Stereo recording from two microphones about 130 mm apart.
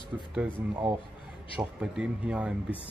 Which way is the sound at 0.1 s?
15° right (ahead or behind).